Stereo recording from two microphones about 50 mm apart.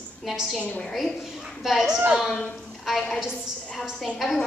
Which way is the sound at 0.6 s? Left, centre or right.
Left.